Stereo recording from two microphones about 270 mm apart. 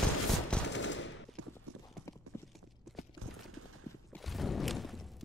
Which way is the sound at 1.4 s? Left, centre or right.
Right.